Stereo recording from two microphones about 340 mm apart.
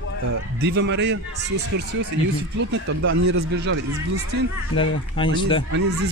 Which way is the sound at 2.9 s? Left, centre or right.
Right.